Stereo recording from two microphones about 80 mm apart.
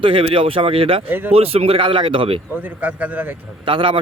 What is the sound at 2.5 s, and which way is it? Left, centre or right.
Speech, right.